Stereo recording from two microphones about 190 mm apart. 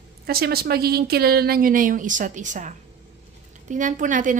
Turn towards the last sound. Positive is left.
turn(degrees=-45)  # may be behind; listen again after turning